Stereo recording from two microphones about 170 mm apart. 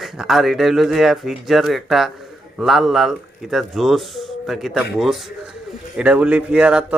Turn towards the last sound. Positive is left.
turn(degrees=-5)  # may be behind; listen again after turning